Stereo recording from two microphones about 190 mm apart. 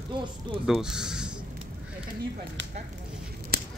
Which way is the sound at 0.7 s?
Centre (ahead or behind).